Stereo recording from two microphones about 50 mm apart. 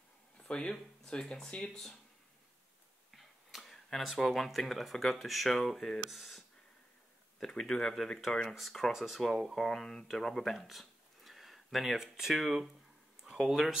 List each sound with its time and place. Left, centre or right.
0.5 s speech: centre
3.1 s a sound: centre
4.3 s speech: centre
7.3 s speech: centre
9.7 s speech: centre